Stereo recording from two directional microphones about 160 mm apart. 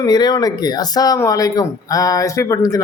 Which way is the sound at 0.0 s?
25° left (ahead or behind).